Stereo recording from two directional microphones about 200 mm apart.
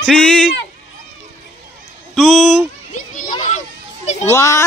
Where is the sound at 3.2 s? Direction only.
40° left (ahead or behind).